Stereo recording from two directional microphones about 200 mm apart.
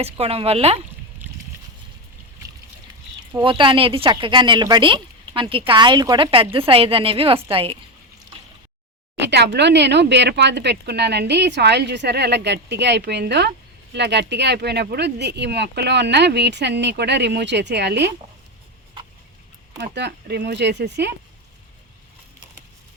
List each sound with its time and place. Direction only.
0.0 s speech: 30° right (ahead or behind)
3.4 s speech: 25° right (ahead or behind)
9.1 s speech: 60° right (ahead or behind)
19.8 s speech: 60° right (ahead or behind)